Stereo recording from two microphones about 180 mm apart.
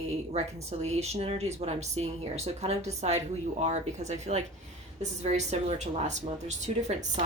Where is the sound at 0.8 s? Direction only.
35° right (ahead or behind).